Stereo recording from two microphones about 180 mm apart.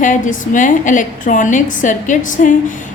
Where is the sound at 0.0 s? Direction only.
45° left (ahead or behind).